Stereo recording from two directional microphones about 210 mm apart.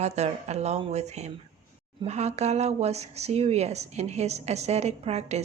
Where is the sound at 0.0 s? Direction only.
30° right (ahead or behind).